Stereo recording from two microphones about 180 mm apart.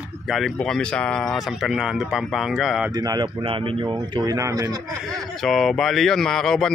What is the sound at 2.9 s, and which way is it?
Speech, 20° right (ahead or behind).